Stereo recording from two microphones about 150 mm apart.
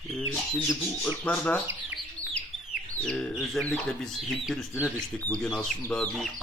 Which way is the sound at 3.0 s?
5° left (ahead or behind).